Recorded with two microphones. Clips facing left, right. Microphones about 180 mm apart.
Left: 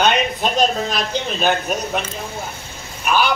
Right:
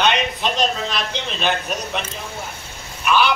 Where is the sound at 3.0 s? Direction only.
45° left (ahead or behind).